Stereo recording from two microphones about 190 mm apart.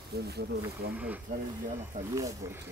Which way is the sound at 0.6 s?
10° right (ahead or behind).